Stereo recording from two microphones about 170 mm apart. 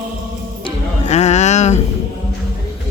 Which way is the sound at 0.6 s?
40° left (ahead or behind).